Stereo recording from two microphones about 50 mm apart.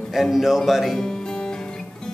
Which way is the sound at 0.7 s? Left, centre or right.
Centre.